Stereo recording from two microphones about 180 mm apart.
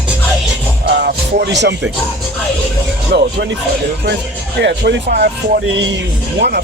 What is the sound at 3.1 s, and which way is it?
Speech, 70° right (ahead or behind).